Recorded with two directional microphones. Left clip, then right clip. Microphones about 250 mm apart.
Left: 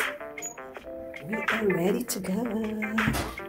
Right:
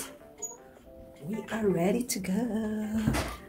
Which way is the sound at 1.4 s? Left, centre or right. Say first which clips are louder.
Left 3 dB; centre.